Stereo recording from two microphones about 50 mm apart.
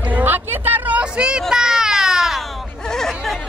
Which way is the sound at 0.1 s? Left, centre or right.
Right.